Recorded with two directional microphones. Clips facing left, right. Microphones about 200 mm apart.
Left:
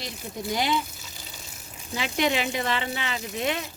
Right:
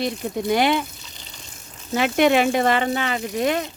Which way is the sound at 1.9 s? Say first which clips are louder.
Right 9 dB; 55° right (ahead or behind).